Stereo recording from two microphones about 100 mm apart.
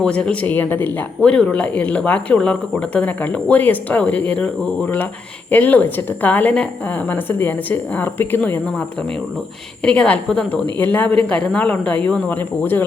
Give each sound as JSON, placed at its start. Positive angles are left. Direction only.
{"t": 0.0, "sound": "a woman's voice", "side_deg": 10}
{"t": 9.8, "sound": "speech", "side_deg": 10}